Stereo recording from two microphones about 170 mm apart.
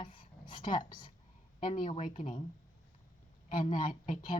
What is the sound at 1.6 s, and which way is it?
Speech, 50° left (ahead or behind).